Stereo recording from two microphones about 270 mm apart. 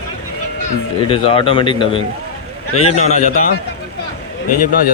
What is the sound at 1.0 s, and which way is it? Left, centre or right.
A man's voice, left.